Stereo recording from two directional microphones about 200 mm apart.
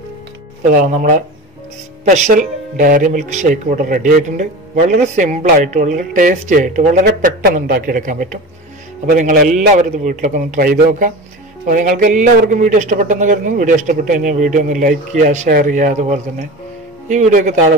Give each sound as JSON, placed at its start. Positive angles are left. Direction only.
{"t": 0.7, "sound": "a man's voice", "side_deg": -40}